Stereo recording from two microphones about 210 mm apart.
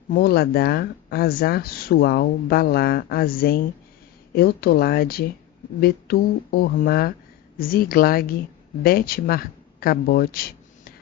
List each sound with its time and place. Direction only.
0.1 s speech: 45° left (ahead or behind)